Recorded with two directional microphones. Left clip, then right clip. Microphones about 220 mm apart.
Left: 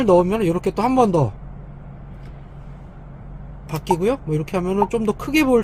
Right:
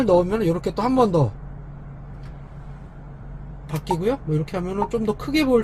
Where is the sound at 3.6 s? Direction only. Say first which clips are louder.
Left 4 dB; 25° left (ahead or behind).